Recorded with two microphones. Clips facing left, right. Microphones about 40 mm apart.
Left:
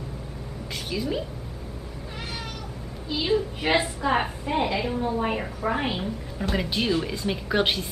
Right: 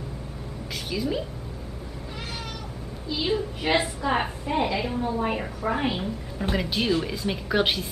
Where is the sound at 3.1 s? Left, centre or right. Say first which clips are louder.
Left 2 dB; centre.